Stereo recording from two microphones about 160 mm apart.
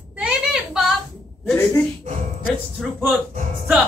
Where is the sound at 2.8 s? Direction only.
Centre (ahead or behind).